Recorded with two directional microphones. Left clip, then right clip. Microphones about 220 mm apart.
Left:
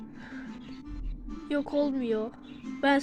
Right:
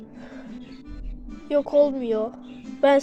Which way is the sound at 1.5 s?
20° left (ahead or behind).